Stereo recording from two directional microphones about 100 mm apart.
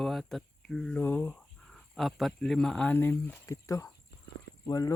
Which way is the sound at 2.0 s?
Centre (ahead or behind).